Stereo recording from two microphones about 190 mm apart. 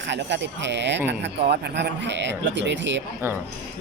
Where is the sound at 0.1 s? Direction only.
65° right (ahead or behind).